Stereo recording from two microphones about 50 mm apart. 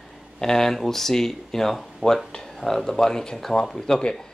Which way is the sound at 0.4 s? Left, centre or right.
Centre.